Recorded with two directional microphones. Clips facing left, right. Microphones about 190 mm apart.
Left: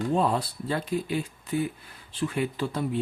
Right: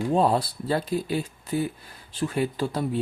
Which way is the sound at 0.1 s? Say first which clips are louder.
Right 5 dB; 35° right (ahead or behind).